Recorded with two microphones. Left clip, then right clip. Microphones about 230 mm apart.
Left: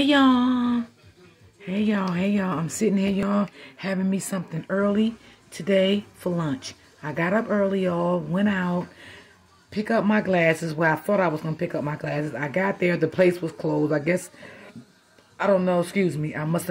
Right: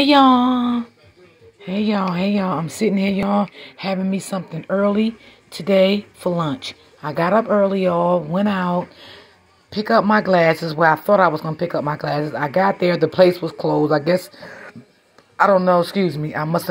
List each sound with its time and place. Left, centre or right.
0.0 s speech: centre
15.4 s speech: centre